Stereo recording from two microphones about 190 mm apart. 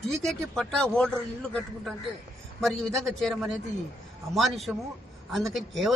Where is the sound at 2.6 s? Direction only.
Centre (ahead or behind).